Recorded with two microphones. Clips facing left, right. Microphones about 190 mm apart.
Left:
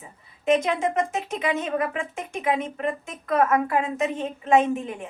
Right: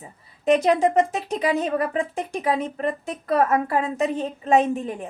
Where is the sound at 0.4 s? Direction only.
35° right (ahead or behind).